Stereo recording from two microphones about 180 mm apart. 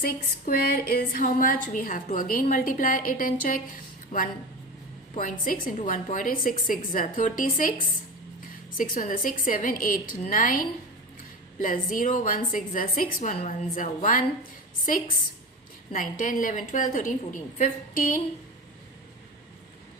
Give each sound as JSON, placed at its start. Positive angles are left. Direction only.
{"t": 0.0, "sound": "a woman's voice", "side_deg": 55}
{"t": 8.8, "sound": "a woman's voice", "side_deg": 45}
{"t": 11.6, "sound": "a woman's voice", "side_deg": 50}
{"t": 15.9, "sound": "a woman's voice", "side_deg": 50}